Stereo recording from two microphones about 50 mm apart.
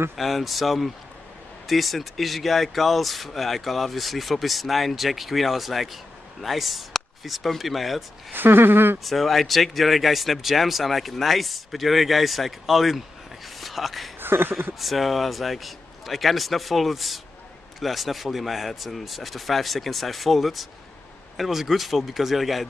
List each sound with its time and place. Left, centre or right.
0.1 s speech: centre
8.3 s speech: right
9.0 s speech: centre
13.6 s a sound: centre
14.2 s a sound: right
14.8 s speech: centre